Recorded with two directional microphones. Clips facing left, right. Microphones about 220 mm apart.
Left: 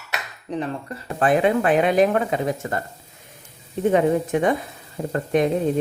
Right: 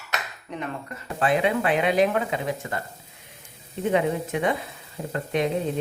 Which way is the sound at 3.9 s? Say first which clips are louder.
Left 4 dB; 45° left (ahead or behind).